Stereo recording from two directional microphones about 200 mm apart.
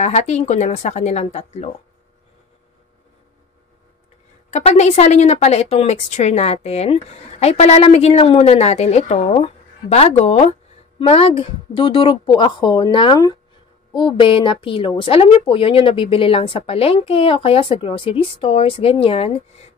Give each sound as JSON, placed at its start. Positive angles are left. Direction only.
{"t": 0.0, "sound": "a woman's voice", "side_deg": 35}
{"t": 4.5, "sound": "a woman's voice", "side_deg": 35}